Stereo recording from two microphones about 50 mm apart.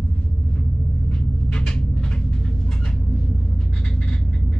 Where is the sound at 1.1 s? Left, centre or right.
Centre.